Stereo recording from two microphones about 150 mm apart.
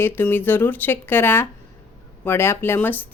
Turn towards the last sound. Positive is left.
turn(degrees=10)  # may be behind; listen again after turning